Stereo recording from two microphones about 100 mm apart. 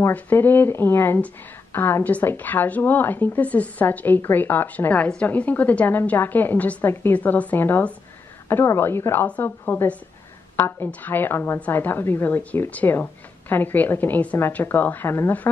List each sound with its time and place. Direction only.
0.1 s a woman's voice: 20° left (ahead or behind)